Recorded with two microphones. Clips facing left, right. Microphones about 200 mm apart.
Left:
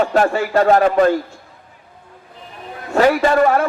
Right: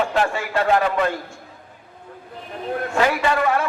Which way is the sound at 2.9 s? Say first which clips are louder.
Left 7 dB; 40° left (ahead or behind).